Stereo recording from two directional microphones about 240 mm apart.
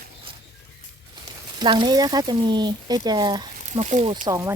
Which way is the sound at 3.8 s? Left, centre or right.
Right.